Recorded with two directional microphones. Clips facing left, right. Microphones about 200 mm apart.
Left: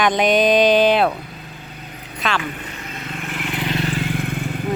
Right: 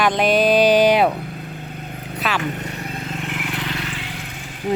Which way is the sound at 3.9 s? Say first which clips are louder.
Left 9 dB; 50° left (ahead or behind).